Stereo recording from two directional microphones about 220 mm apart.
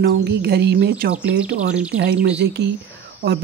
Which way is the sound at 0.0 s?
50° right (ahead or behind).